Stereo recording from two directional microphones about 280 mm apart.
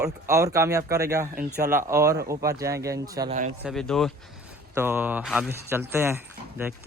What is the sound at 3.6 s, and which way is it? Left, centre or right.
A man's voice, centre.